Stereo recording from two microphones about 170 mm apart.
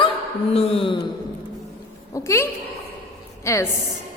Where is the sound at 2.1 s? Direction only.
15° left (ahead or behind).